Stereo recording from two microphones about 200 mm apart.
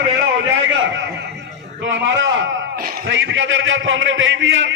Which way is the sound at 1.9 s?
70° right (ahead or behind).